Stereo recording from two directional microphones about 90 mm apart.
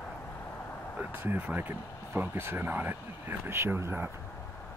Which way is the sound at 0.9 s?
20° right (ahead or behind).